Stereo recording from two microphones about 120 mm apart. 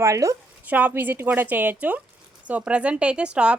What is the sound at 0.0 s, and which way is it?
Speech, 25° right (ahead or behind).